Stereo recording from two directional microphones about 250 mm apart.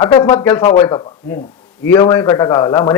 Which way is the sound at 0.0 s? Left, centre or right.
Centre.